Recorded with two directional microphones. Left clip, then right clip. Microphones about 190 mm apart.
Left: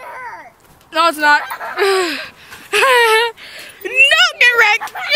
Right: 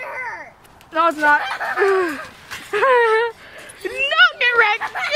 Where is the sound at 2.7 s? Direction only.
20° left (ahead or behind).